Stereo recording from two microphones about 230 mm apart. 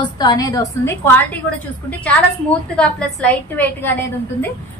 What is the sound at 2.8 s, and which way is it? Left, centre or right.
A woman's voice, centre.